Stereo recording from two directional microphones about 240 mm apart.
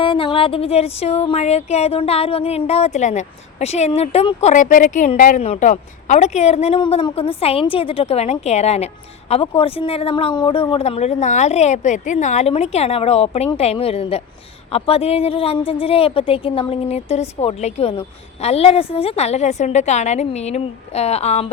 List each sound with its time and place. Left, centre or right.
0.0 s speech: left